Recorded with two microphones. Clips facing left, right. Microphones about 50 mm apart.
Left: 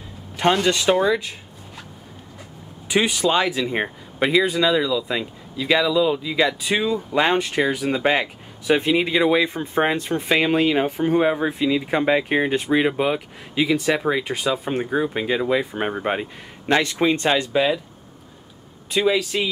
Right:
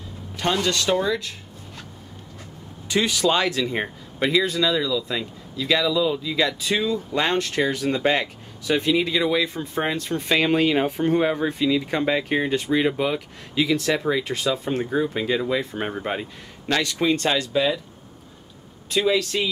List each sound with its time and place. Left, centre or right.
0.6 s speech: centre
2.9 s speech: centre
18.9 s speech: centre